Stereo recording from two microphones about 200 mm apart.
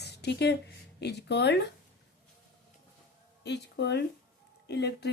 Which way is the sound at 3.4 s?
60° left (ahead or behind).